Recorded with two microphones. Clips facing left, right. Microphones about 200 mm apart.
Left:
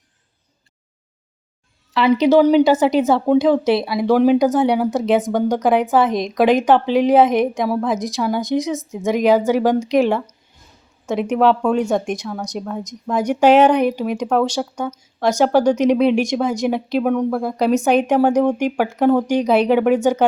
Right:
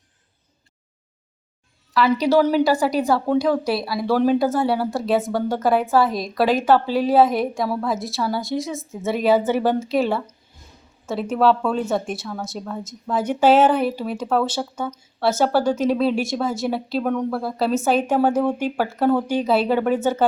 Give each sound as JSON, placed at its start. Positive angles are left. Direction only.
{"t": 1.9, "sound": "a woman's voice", "side_deg": 25}